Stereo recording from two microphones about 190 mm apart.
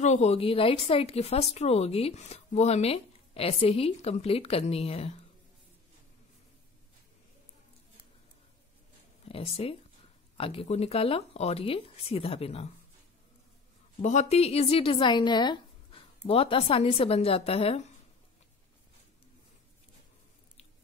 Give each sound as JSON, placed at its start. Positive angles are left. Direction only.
{"t": 0.0, "sound": "speech", "side_deg": 35}
{"t": 9.2, "sound": "speech", "side_deg": 30}
{"t": 14.0, "sound": "a woman's voice", "side_deg": 35}